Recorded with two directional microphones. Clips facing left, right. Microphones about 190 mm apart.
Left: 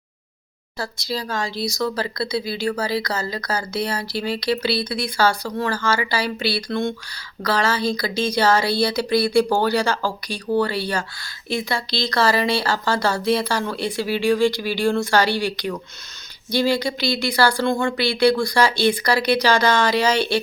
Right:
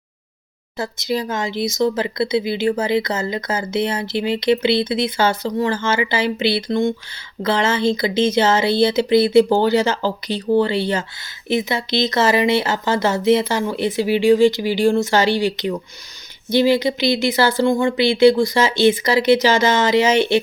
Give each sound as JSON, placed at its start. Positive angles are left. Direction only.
{"t": 0.8, "sound": "speech", "side_deg": -20}